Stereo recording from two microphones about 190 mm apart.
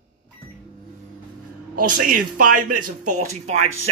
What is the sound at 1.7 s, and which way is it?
Speech, 45° right (ahead or behind).